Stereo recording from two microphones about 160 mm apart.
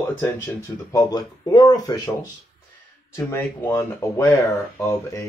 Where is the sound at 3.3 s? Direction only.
15° left (ahead or behind).